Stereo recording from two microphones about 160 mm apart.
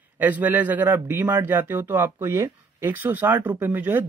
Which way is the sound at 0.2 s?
10° right (ahead or behind).